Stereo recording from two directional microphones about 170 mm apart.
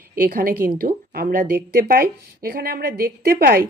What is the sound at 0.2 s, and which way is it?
Speech, 55° right (ahead or behind).